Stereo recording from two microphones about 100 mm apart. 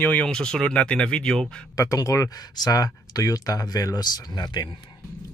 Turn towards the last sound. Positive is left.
turn(degrees=45)  # may be behind; listen again after turning